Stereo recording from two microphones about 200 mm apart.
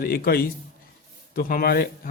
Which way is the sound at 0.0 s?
50° left (ahead or behind).